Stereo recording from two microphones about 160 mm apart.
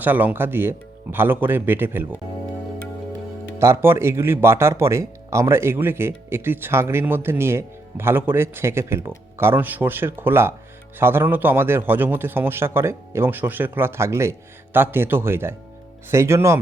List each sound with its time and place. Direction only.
0.0 s speech: 10° right (ahead or behind)
3.6 s speech: 15° right (ahead or behind)